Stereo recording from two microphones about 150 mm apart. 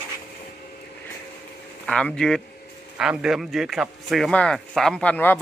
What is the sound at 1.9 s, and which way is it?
Speech, 5° left (ahead or behind).